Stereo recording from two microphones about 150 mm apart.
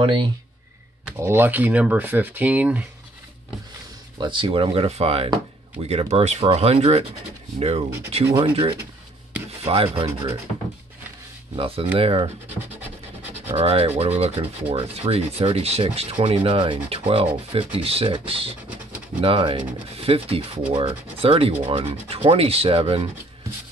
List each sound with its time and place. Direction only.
0.0 s speech: 35° right (ahead or behind)
1.2 s speech: 15° right (ahead or behind)
4.2 s speech: 35° right (ahead or behind)
11.5 s speech: 35° right (ahead or behind)
13.6 s speech: 45° right (ahead or behind)